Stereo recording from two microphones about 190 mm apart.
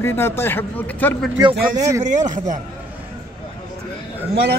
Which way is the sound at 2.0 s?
40° right (ahead or behind).